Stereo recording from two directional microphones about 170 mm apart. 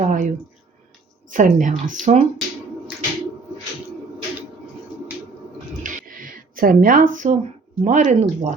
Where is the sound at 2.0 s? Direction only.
5° left (ahead or behind).